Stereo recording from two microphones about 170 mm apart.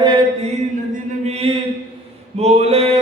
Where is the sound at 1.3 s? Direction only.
35° right (ahead or behind).